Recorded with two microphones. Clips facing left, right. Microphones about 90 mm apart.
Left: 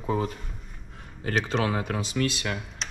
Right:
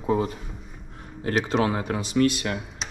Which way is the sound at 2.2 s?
40° right (ahead or behind).